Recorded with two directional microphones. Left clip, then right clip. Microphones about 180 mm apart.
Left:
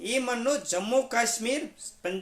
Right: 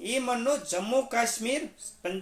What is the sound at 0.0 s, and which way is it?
Speech, 20° left (ahead or behind).